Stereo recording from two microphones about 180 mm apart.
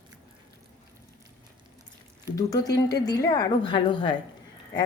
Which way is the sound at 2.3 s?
20° left (ahead or behind).